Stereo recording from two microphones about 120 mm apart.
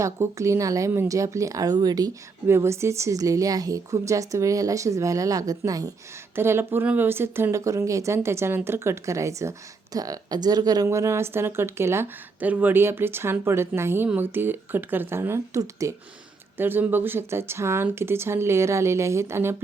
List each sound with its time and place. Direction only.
0.0 s speech: 25° right (ahead or behind)
2.5 s speech: 25° right (ahead or behind)
6.3 s speech: 20° right (ahead or behind)
10.8 s speech: 25° right (ahead or behind)